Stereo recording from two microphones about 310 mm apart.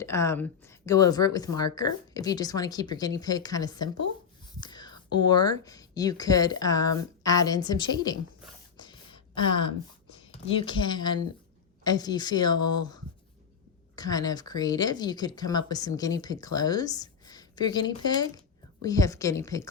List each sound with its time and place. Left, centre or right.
0.0 s a woman's voice: centre
8.8 s a sound: centre
9.5 s speech: left
10.4 s speech: centre
13.9 s speech: centre